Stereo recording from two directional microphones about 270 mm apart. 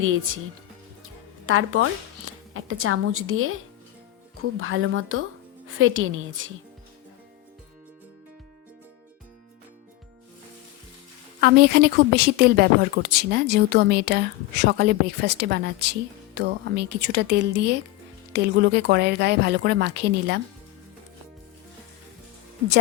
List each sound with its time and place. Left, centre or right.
0.0 s a woman's voice: right
1.5 s a woman's voice: right
11.3 s a woman's voice: right